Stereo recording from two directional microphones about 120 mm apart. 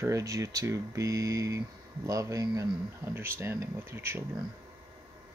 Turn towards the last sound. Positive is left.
turn(degrees=-20)  # may be behind; listen again after turning